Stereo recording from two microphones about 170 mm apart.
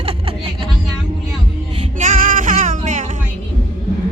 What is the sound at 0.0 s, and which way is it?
Music, 35° right (ahead or behind).